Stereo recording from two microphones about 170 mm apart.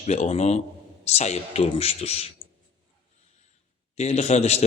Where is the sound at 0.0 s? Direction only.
40° left (ahead or behind).